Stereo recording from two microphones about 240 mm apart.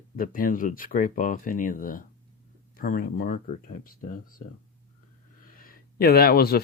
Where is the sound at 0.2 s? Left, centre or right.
Left.